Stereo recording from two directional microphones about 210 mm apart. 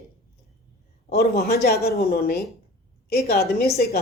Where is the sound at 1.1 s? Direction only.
50° left (ahead or behind).